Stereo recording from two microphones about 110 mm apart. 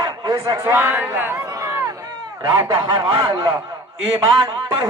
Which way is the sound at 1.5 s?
30° right (ahead or behind).